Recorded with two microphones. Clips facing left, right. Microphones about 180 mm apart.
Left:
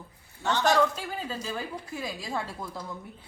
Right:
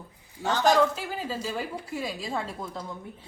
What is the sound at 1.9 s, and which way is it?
Speech, 25° right (ahead or behind).